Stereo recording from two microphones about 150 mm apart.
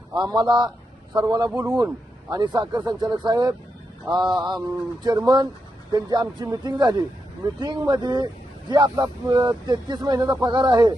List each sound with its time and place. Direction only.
0.1 s speech: 30° right (ahead or behind)